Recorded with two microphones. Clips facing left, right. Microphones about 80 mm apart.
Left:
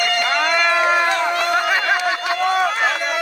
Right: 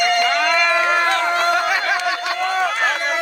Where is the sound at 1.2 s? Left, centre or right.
Right.